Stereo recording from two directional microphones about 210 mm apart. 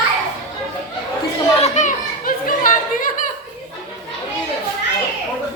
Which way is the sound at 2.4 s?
40° left (ahead or behind).